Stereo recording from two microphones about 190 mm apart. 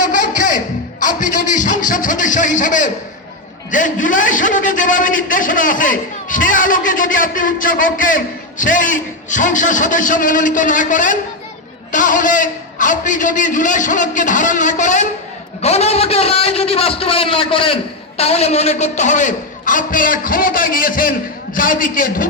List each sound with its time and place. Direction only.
0.0 s music: 45° left (ahead or behind)
3.7 s a man's voice: 45° left (ahead or behind)